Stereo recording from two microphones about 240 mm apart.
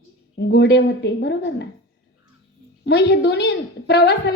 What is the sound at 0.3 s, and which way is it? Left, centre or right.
A woman's voice, left.